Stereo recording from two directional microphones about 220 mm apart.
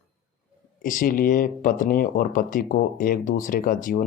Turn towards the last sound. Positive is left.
turn(degrees=35)  # may be behind; listen again after turning